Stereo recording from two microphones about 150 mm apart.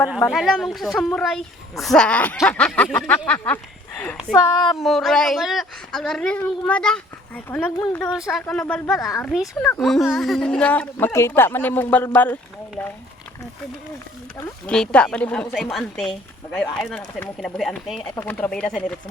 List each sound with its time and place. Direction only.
0.3 s a woman's voice: centre (ahead or behind)
4.5 s a woman's voice: 30° left (ahead or behind)
4.8 s a woman's voice: centre (ahead or behind)
8.1 s a woman's voice: 5° right (ahead or behind)
8.4 s speech: 10° left (ahead or behind)
9.0 s a woman's voice: 20° left (ahead or behind)
9.3 s a woman's voice: centre (ahead or behind)
14.7 s a woman's voice: 5° left (ahead or behind)
18.2 s speech: 10° left (ahead or behind)